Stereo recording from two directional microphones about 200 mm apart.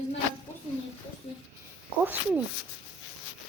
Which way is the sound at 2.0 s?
10° right (ahead or behind).